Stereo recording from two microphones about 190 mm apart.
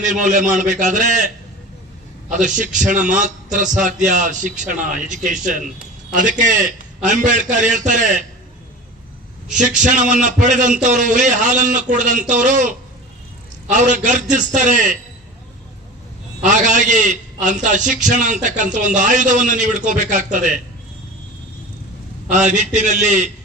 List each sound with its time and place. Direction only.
0.0 s a man's voice: 40° right (ahead or behind)
2.3 s a man's voice: 40° right (ahead or behind)
9.6 s a man's voice: 40° right (ahead or behind)
16.4 s a man's voice: 40° right (ahead or behind)
22.3 s a man's voice: 40° right (ahead or behind)